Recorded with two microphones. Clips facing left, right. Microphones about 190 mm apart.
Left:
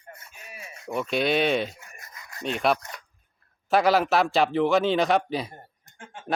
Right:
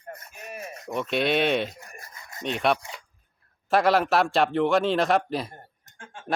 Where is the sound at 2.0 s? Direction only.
30° right (ahead or behind).